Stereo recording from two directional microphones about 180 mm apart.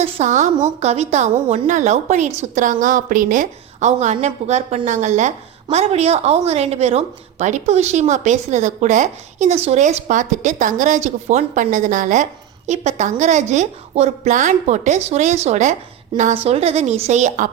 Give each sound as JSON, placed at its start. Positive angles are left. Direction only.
{"t": 0.0, "sound": "a woman's voice", "side_deg": -40}